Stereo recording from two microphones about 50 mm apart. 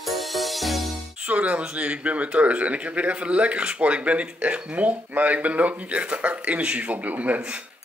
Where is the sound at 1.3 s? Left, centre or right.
Right.